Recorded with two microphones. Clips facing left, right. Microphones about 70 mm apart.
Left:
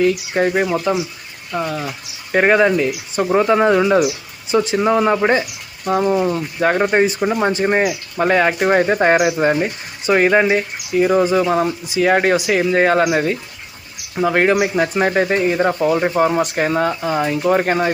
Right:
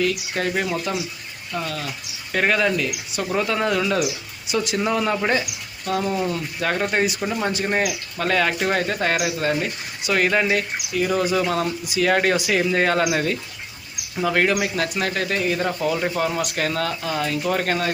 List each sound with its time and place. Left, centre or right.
0.0 s speech: centre